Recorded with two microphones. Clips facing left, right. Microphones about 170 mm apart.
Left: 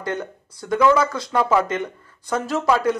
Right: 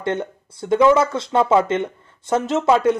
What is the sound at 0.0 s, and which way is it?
Speech, 25° right (ahead or behind).